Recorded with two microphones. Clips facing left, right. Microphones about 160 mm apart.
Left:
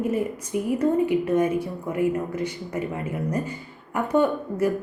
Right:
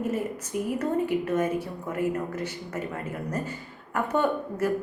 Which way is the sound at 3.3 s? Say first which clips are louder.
Left 4 dB; 10° left (ahead or behind).